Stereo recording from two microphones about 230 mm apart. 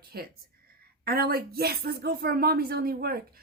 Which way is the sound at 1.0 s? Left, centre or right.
Right.